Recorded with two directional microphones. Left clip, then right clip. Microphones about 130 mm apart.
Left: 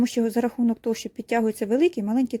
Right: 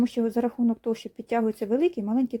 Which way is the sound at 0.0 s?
50° left (ahead or behind).